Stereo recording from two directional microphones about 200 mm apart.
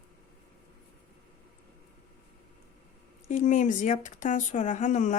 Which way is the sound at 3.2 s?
40° left (ahead or behind).